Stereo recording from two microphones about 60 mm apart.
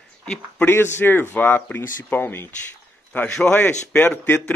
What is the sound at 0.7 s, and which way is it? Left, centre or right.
A man's voice, left.